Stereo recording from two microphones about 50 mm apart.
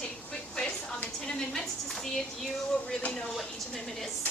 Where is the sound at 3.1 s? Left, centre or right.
Centre.